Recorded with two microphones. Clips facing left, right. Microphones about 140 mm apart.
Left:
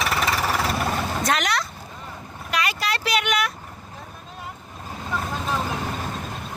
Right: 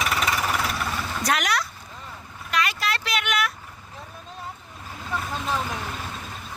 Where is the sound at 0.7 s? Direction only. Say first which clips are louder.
Left 5 dB; 45° left (ahead or behind).